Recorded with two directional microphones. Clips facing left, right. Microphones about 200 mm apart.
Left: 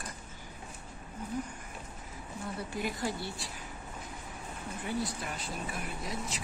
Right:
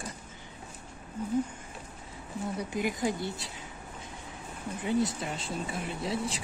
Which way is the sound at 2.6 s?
15° right (ahead or behind).